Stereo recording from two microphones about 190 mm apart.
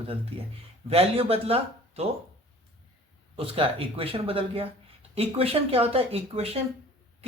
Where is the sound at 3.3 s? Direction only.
30° right (ahead or behind).